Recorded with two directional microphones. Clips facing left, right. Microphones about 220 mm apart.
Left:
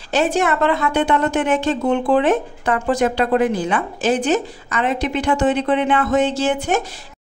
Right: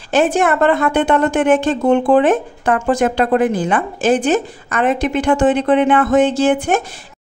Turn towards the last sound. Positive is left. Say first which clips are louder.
# right 5 dB
turn(degrees=-50)  # may be behind; listen again after turning